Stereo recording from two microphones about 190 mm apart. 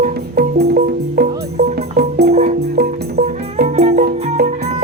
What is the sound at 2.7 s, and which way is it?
Music, 55° right (ahead or behind).